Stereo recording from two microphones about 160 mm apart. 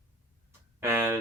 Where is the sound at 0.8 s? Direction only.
15° right (ahead or behind).